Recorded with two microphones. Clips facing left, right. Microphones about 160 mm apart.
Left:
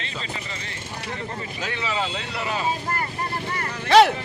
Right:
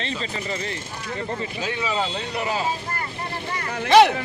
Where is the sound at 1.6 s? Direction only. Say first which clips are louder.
Right 1 dB; 15° right (ahead or behind).